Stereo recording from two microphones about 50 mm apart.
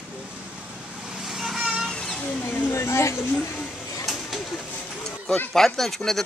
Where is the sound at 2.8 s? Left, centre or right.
Left.